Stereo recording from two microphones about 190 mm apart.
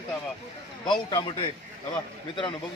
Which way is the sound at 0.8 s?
25° left (ahead or behind).